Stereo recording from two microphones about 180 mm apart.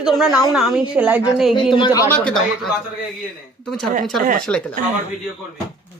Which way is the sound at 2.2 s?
5° left (ahead or behind).